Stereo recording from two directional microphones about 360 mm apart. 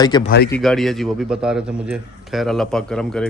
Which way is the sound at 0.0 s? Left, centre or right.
Centre.